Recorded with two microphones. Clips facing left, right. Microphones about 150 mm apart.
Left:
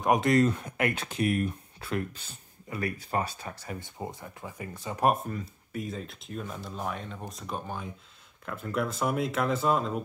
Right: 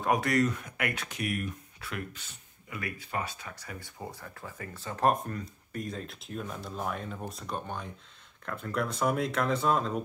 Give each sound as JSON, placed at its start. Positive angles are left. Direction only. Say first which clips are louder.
{"t": 0.0, "sound": "speech", "louder": "left 4 dB", "side_deg": 20}